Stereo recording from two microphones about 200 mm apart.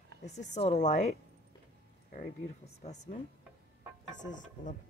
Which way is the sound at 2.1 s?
35° left (ahead or behind).